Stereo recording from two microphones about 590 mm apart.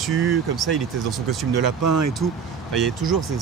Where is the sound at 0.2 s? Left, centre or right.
Right.